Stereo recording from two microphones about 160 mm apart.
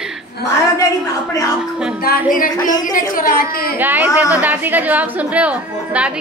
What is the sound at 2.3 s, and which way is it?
A woman's voice, 60° left (ahead or behind).